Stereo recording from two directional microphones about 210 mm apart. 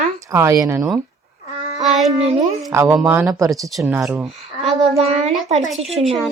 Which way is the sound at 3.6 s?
Centre (ahead or behind).